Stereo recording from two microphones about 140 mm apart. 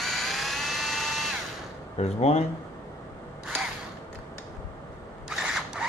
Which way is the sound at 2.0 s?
50° left (ahead or behind).